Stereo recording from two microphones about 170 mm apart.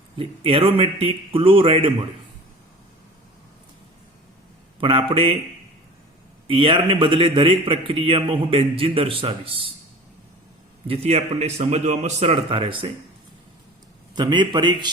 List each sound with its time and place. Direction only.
0.2 s a man's voice: 35° right (ahead or behind)
4.8 s a man's voice: 30° right (ahead or behind)
6.5 s a man's voice: 30° right (ahead or behind)
10.8 s a man's voice: 35° right (ahead or behind)
14.2 s a man's voice: 25° right (ahead or behind)